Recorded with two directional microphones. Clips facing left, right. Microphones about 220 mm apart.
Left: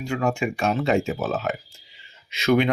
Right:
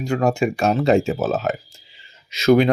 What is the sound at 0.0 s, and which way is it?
Speech, 40° right (ahead or behind).